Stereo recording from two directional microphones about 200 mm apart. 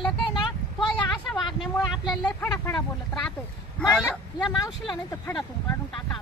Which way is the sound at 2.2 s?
15° left (ahead or behind).